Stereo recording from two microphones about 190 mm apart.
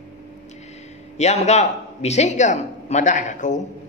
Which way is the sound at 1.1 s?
35° left (ahead or behind).